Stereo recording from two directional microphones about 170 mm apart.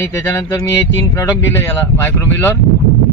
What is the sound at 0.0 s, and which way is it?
Speech, 15° left (ahead or behind).